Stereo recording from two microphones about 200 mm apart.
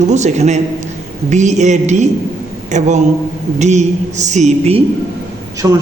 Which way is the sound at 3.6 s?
35° right (ahead or behind).